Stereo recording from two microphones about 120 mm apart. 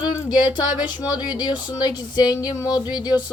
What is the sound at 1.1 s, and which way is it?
Speech, 40° left (ahead or behind).